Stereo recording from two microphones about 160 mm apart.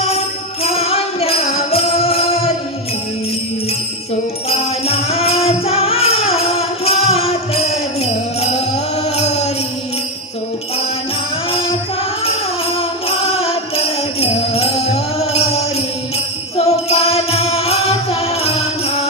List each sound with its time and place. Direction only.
0.6 s music: 40° left (ahead or behind)
4.4 s music: 40° left (ahead or behind)
11.5 s music: 35° left (ahead or behind)